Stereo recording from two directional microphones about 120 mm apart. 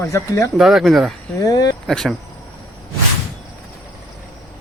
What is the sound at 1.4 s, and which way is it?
Speech, 30° left (ahead or behind).